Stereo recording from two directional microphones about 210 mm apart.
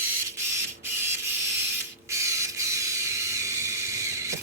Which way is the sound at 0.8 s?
10° right (ahead or behind).